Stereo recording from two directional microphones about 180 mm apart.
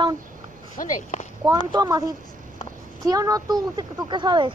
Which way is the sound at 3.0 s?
20° right (ahead or behind).